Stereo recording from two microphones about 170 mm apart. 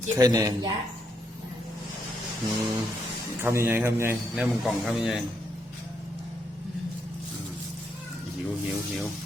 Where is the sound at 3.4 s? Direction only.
15° right (ahead or behind).